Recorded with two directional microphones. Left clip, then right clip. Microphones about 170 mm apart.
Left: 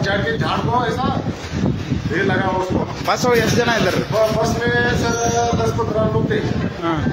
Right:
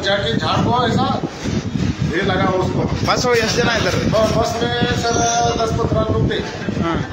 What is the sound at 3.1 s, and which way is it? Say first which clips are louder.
Speech: even; 15° left (ahead or behind).